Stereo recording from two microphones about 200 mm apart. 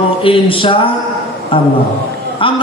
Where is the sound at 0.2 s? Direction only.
25° left (ahead or behind).